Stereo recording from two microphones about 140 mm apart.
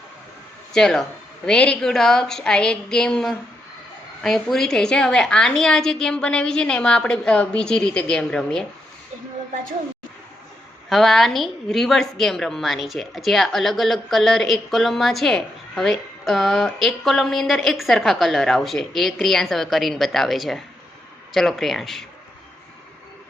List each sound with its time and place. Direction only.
0.7 s a woman's voice: 5° left (ahead or behind)
10.8 s a woman's voice: centre (ahead or behind)